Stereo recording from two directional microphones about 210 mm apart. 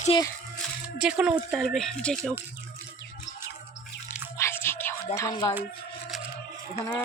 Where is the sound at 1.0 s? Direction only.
5° right (ahead or behind).